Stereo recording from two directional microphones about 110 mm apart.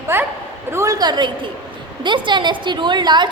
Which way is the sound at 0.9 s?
40° right (ahead or behind).